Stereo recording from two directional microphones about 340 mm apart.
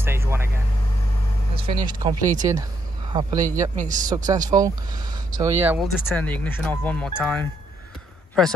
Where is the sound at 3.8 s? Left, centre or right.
Right.